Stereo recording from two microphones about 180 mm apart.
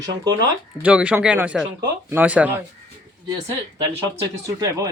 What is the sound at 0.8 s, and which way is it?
Speech, 5° right (ahead or behind).